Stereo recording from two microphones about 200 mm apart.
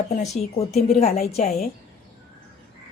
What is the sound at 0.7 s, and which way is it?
Speech, centre (ahead or behind).